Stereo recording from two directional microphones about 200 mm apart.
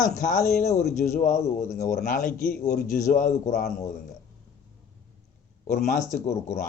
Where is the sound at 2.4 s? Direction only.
45° left (ahead or behind).